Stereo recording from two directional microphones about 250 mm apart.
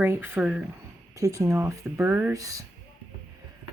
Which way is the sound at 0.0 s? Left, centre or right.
Centre.